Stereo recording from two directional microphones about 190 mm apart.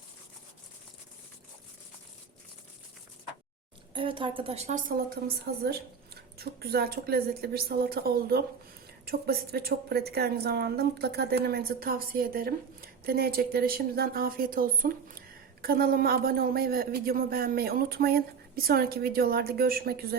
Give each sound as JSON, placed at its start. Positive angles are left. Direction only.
{"t": 3.9, "sound": "a woman's voice", "side_deg": -25}
{"t": 4.9, "sound": "a woman's voice", "side_deg": -50}